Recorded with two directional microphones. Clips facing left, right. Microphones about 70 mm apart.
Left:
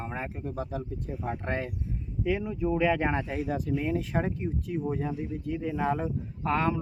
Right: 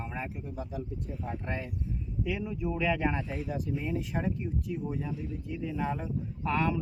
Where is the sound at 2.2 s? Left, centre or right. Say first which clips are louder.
Left 6 dB; left.